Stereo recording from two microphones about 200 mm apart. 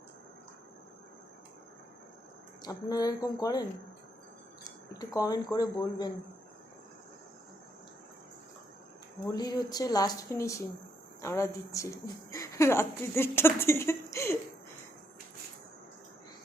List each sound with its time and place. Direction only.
2.6 s speech: 20° left (ahead or behind)
9.3 s a woman's voice: 20° left (ahead or behind)